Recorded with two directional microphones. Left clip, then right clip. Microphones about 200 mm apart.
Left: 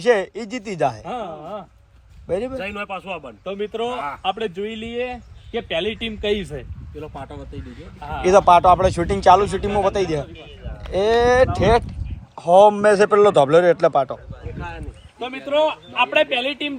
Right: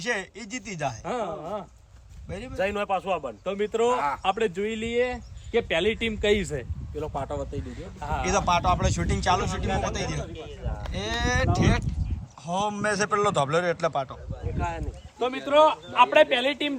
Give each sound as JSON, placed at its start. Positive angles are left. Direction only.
{"t": 0.0, "sound": "speech", "side_deg": 0}
{"t": 2.8, "sound": "a man's voice", "side_deg": -15}
{"t": 3.4, "sound": "speech", "side_deg": -5}
{"t": 7.0, "sound": "speech", "side_deg": -20}
{"t": 8.0, "sound": "speech", "side_deg": 0}
{"t": 14.4, "sound": "boat", "side_deg": -45}
{"t": 15.2, "sound": "speech", "side_deg": -5}